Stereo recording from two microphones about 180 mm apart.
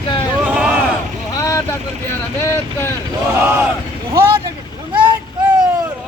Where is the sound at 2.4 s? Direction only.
15° left (ahead or behind).